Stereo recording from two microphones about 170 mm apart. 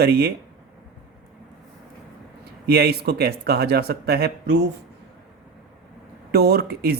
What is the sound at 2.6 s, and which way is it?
Speech, 70° right (ahead or behind).